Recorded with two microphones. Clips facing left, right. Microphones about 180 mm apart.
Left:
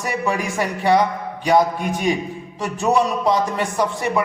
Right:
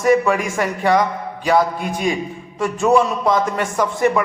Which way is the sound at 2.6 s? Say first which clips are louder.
Right 3 dB; 15° left (ahead or behind).